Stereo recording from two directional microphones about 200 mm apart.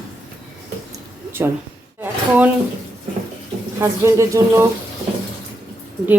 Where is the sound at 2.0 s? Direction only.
10° right (ahead or behind).